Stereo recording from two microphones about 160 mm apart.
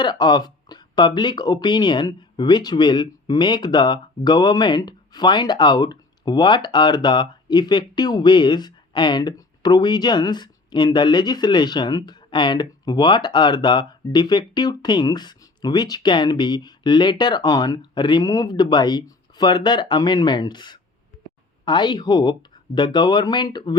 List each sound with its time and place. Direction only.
0.0 s speech: 25° left (ahead or behind)